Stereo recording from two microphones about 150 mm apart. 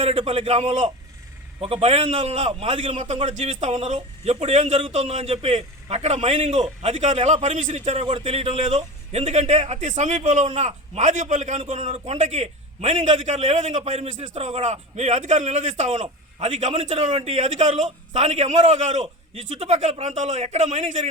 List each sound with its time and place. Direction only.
0.0 s a man's voice: 40° right (ahead or behind)